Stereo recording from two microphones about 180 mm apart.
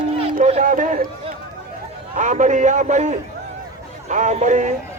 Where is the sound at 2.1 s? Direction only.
45° right (ahead or behind).